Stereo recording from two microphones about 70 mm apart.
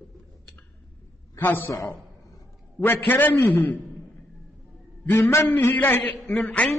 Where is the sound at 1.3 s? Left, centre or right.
Left.